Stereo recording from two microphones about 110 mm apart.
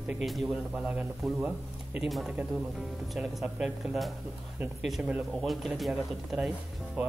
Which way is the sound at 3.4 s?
10° right (ahead or behind).